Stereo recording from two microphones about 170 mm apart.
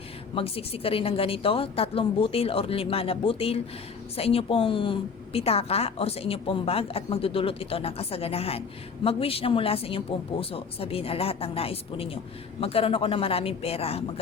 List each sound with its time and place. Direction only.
0.3 s speech: 35° left (ahead or behind)